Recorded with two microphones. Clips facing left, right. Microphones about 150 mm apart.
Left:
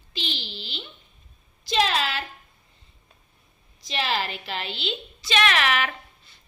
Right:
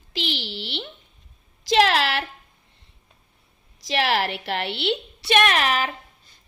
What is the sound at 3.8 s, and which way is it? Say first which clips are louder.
A woman's voice: right 5 dB; 80° right.